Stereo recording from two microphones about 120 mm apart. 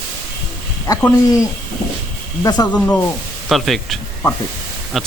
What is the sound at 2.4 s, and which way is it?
Speech, 35° left (ahead or behind).